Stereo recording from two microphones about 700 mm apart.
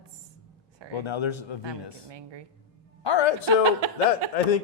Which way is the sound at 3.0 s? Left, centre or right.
Left.